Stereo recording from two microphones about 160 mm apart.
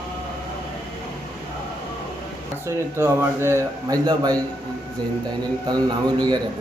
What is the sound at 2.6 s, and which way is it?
A man's voice, 15° right (ahead or behind).